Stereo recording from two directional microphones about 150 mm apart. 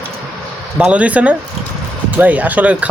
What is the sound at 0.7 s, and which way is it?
Speech, 10° right (ahead or behind).